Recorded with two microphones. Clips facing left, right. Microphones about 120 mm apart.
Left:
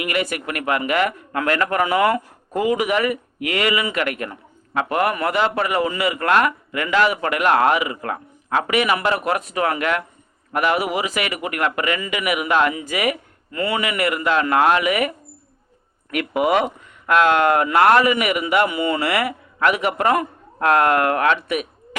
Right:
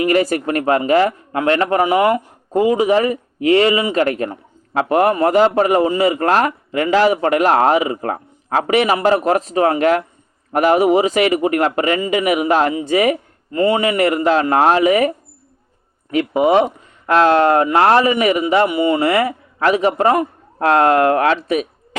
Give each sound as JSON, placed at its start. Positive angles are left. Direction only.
{"t": 0.0, "sound": "a man's voice", "side_deg": -35}
{"t": 16.1, "sound": "a man's voice", "side_deg": -25}